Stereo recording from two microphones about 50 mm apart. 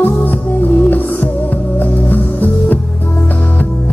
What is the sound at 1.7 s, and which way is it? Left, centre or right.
Music, left.